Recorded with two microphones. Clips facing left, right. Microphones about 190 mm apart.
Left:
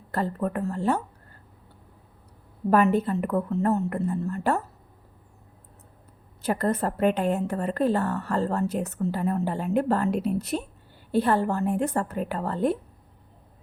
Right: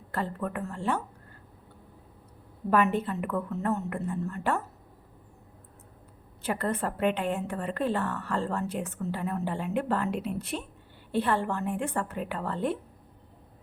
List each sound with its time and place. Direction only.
0.1 s a woman's voice: 40° left (ahead or behind)
2.6 s a woman's voice: 40° left (ahead or behind)
6.4 s a woman's voice: 40° left (ahead or behind)